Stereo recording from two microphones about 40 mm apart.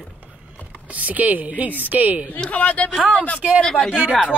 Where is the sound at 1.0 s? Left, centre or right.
Right.